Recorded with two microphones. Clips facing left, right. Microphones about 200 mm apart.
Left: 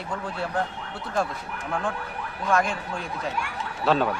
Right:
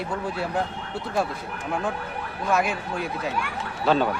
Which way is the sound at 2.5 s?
5° right (ahead or behind).